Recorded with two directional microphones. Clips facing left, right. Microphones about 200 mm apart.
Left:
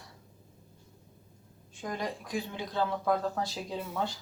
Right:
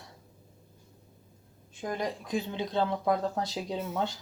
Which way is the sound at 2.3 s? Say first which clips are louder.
Right 4 dB; 25° right (ahead or behind).